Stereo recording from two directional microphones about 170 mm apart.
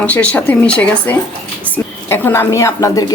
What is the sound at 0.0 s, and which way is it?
A woman's voice, 10° left (ahead or behind).